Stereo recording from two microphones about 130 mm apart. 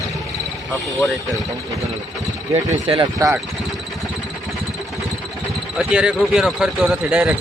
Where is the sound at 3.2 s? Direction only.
25° right (ahead or behind).